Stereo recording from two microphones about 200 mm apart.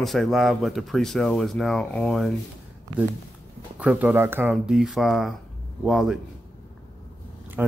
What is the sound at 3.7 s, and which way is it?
Speech, 5° right (ahead or behind).